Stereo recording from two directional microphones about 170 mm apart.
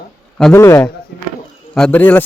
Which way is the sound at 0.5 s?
15° left (ahead or behind).